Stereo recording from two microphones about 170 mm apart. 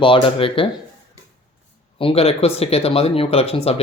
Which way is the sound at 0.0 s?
30° left (ahead or behind).